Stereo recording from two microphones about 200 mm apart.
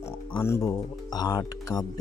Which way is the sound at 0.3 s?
15° left (ahead or behind).